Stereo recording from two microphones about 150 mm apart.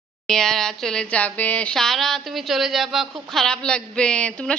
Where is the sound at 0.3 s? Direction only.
5° left (ahead or behind).